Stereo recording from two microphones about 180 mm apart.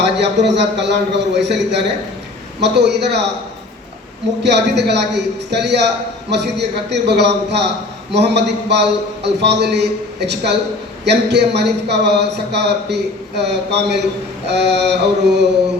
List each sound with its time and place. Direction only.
0.2 s speech: 70° right (ahead or behind)
4.4 s speech: 70° right (ahead or behind)